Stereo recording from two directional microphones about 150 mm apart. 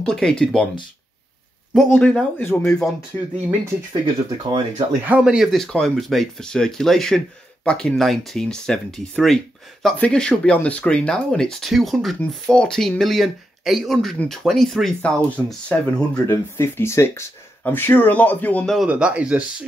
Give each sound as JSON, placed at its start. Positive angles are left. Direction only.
{"t": 0.1, "sound": "speech", "side_deg": 5}
{"t": 1.9, "sound": "speech", "side_deg": 5}
{"t": 3.9, "sound": "speech", "side_deg": -30}
{"t": 5.0, "sound": "speech", "side_deg": -10}
{"t": 18.8, "sound": "speech", "side_deg": -5}